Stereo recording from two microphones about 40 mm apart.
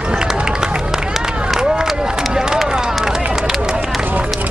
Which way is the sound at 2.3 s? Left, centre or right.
Centre.